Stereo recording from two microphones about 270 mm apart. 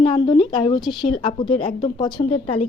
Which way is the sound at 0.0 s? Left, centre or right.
Centre.